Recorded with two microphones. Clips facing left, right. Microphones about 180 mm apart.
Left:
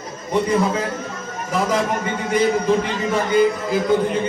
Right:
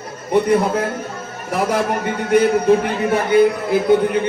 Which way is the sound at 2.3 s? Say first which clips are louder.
Right 4 dB; 60° right (ahead or behind).